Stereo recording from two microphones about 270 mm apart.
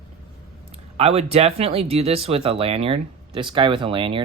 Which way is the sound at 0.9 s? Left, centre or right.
Right.